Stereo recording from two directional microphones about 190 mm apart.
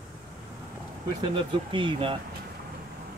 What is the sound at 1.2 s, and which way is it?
Speech, 25° right (ahead or behind).